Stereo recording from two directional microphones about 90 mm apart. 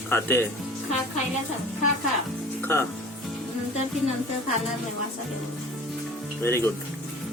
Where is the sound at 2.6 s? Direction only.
30° left (ahead or behind).